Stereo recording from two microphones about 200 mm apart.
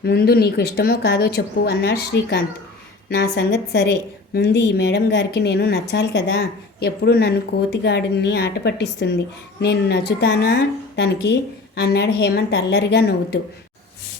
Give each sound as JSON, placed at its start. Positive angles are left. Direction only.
{"t": 0.0, "sound": "a woman's voice", "side_deg": 50}